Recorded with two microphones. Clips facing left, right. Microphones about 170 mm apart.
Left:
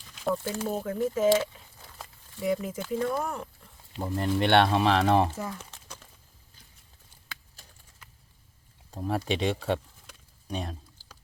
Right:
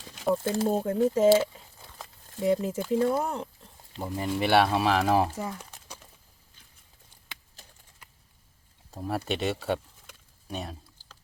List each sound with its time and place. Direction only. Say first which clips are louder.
0.5 s speech: right 5 dB; 30° right (ahead or behind)
1.4 s a sound: right 3 dB; centre (ahead or behind)
2.4 s speech: right 3 dB; 30° right (ahead or behind)
2.7 s speech: right 4 dB; 10° right (ahead or behind)
3.9 s speech: left 2 dB; 5° right (ahead or behind)
8.9 s speech: left 1 dB; centre (ahead or behind)